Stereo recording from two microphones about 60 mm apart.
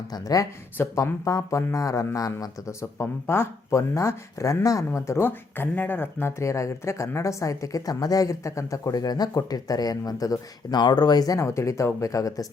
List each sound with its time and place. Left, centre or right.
0.1 s speech: left
0.9 s speech: left
2.1 s a man's voice: left
3.0 s speech: left
3.8 s speech: left
4.6 s speech: left
4.9 s speech: left
5.2 s speech: left
6.4 s speech: left
10.6 s speech: left
11.2 s a man's voice: left
11.4 s speech: left
11.9 s speech: left